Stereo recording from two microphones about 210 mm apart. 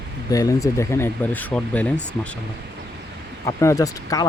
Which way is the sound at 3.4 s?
15° left (ahead or behind).